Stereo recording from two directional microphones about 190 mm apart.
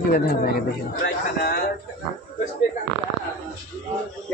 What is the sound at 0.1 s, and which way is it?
Speech, 50° left (ahead or behind).